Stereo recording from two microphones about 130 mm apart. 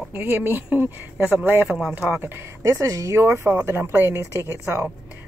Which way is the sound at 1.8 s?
5° right (ahead or behind).